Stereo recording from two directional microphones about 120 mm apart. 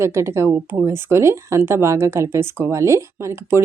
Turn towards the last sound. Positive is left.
turn(degrees=-20)  # may be behind; listen again after turning